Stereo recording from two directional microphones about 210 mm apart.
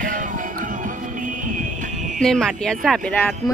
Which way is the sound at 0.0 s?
40° right (ahead or behind).